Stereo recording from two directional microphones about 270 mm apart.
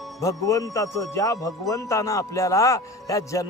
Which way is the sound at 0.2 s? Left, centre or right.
Centre.